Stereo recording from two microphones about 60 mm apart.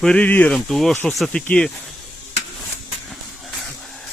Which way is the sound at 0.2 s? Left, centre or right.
Left.